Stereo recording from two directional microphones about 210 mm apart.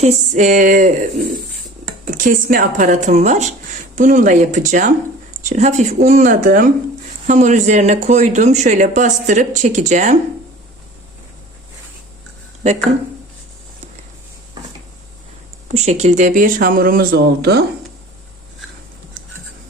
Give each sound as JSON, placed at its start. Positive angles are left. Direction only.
{"t": 0.0, "sound": "speech", "side_deg": -35}
{"t": 15.7, "sound": "speech", "side_deg": -30}